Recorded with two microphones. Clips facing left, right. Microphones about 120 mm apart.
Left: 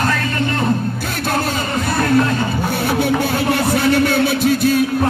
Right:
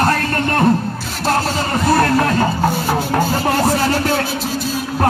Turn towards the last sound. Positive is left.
turn(degrees=60)  # may be behind; listen again after turning